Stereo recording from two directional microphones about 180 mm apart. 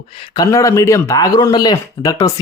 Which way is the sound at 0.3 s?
20° left (ahead or behind).